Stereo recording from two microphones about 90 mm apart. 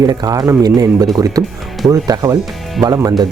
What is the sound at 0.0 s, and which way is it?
Speech, 45° right (ahead or behind).